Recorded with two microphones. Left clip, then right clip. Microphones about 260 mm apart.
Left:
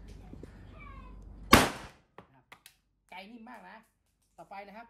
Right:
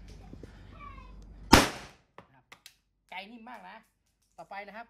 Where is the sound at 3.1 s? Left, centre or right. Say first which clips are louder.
Right 4 dB; centre.